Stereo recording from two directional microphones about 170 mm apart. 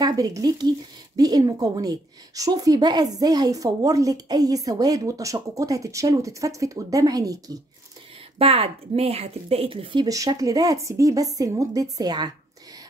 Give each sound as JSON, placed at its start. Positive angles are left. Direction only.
{"t": 0.0, "sound": "speech", "side_deg": -20}
{"t": 8.4, "sound": "speech", "side_deg": -35}